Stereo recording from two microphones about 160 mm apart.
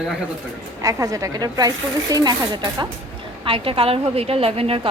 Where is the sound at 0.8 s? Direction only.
20° right (ahead or behind).